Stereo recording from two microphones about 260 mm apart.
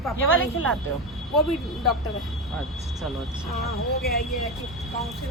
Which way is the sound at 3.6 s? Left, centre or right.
Left.